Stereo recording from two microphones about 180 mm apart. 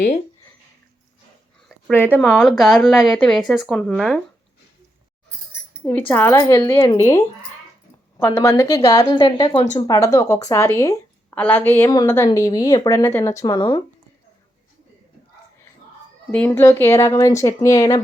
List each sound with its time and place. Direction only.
2.1 s speech: 5° left (ahead or behind)
5.8 s speech: 10° left (ahead or behind)
6.3 s speech: 20° left (ahead or behind)
8.4 s speech: 15° left (ahead or behind)
16.3 s speech: 10° left (ahead or behind)